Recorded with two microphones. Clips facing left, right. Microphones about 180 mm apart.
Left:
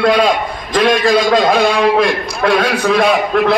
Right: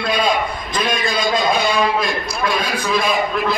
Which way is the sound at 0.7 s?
90° left.